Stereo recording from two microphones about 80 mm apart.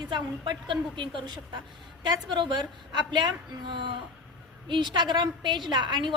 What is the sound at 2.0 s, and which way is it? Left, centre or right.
A woman's voice, right.